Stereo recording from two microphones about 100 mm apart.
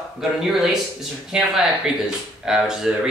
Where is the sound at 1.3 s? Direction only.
5° right (ahead or behind).